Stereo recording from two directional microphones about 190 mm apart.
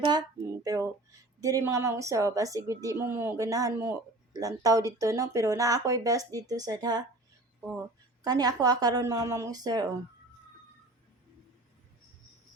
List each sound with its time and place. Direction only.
0.0 s a sound: 20° right (ahead or behind)
1.4 s speech: 15° right (ahead or behind)
8.2 s a woman's voice: 20° right (ahead or behind)